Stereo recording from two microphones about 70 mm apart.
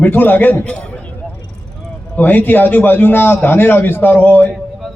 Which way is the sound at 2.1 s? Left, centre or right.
Left.